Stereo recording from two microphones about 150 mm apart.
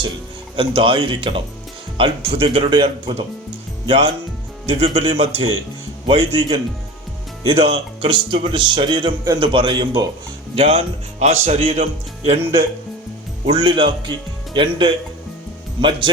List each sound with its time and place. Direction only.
0.5 s speech: 35° right (ahead or behind)
13.5 s speech: 30° right (ahead or behind)